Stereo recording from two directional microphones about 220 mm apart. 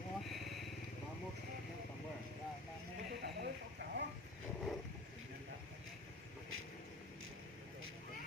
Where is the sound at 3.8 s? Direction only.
55° right (ahead or behind).